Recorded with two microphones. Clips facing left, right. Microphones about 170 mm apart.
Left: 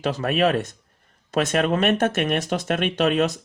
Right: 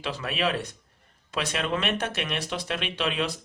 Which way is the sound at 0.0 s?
45° left (ahead or behind).